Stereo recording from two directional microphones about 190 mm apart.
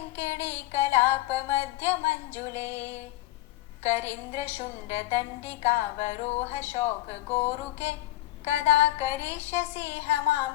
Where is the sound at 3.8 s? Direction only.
35° left (ahead or behind).